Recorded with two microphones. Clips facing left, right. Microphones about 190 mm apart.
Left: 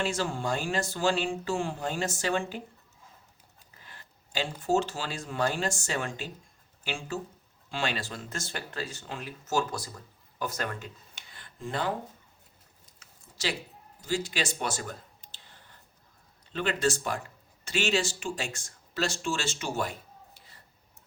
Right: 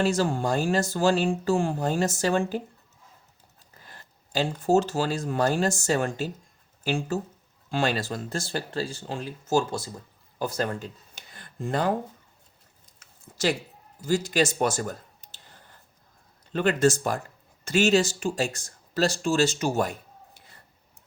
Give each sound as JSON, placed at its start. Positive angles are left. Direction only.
{"t": 0.0, "sound": "speech", "side_deg": -40}
{"t": 3.8, "sound": "speech", "side_deg": -40}
{"t": 13.3, "sound": "speech", "side_deg": -45}
{"t": 16.5, "sound": "speech", "side_deg": -45}